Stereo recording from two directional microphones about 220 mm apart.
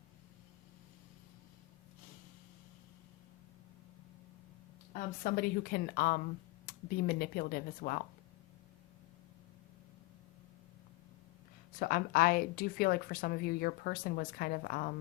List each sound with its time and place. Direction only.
4.9 s speech: 40° left (ahead or behind)
11.8 s a woman's voice: 40° left (ahead or behind)